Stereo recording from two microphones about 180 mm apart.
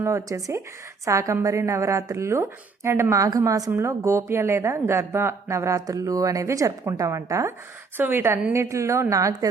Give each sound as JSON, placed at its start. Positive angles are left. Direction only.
{"t": 0.0, "sound": "speech", "side_deg": -15}